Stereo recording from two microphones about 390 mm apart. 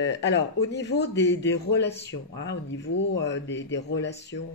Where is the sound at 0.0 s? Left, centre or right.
Left.